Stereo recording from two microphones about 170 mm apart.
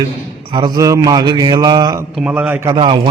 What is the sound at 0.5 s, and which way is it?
Mantra, 20° right (ahead or behind).